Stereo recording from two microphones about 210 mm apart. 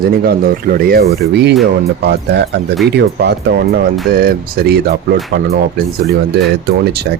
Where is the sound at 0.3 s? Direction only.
45° right (ahead or behind).